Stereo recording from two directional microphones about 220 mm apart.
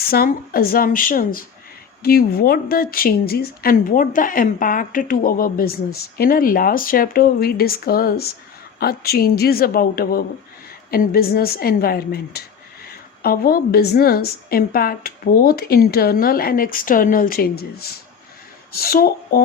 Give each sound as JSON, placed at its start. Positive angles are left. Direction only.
{"t": 0.1, "sound": "a woman's voice", "side_deg": 45}